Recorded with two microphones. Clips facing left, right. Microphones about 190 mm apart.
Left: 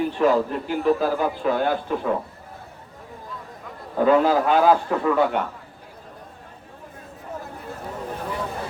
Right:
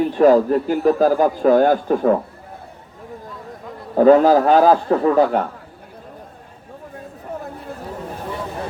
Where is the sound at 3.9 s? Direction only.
40° right (ahead or behind).